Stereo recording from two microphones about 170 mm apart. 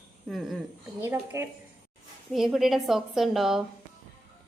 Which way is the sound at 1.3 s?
15° right (ahead or behind).